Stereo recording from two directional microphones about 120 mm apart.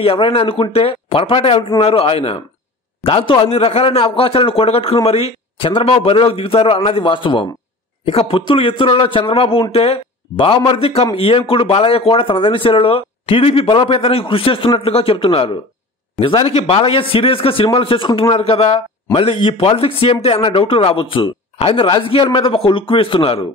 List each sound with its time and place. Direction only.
0.0 s speech: 50° left (ahead or behind)